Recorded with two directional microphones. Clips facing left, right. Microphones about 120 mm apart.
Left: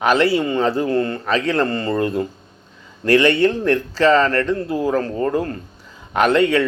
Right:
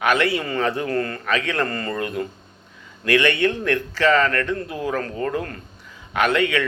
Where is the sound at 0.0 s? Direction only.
30° left (ahead or behind).